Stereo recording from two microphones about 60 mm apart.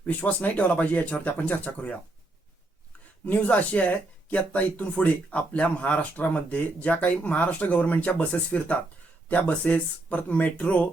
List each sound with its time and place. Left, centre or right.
0.0 s speech: left
3.2 s speech: left